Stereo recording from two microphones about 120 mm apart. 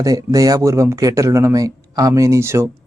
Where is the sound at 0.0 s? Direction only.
30° right (ahead or behind).